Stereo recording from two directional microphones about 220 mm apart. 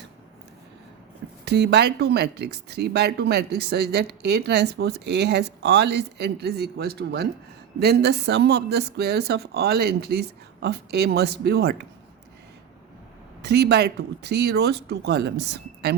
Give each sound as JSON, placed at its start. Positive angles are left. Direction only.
{"t": 1.5, "sound": "speech", "side_deg": -50}
{"t": 13.4, "sound": "speech", "side_deg": -50}